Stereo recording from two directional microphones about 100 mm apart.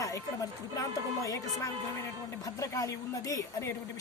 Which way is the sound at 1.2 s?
35° left (ahead or behind).